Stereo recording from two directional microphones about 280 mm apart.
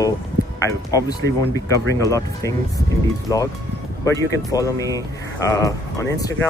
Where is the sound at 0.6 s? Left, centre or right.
Centre.